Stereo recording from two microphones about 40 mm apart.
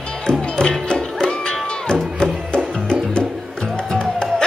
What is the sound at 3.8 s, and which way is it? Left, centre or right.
Music, centre.